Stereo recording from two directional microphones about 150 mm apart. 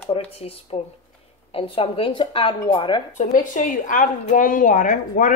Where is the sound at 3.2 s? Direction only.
60° left (ahead or behind).